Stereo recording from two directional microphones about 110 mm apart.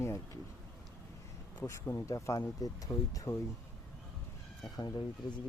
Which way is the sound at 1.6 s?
25° left (ahead or behind).